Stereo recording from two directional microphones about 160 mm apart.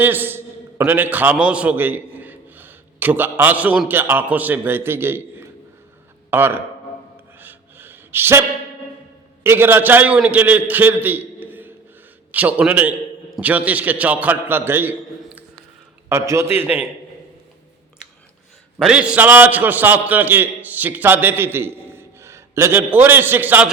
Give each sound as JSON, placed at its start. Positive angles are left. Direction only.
{"t": 0.0, "sound": "a man's voice", "side_deg": -10}
{"t": 7.3, "sound": "gasp", "side_deg": -10}
{"t": 9.4, "sound": "a man's voice", "side_deg": -15}
{"t": 16.0, "sound": "a man's voice", "side_deg": -15}
{"t": 18.8, "sound": "a man's voice", "side_deg": -5}